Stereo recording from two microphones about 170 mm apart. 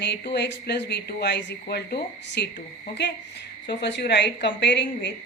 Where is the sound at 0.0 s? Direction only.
80° left.